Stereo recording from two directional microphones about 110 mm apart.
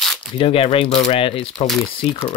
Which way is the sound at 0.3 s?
55° left (ahead or behind).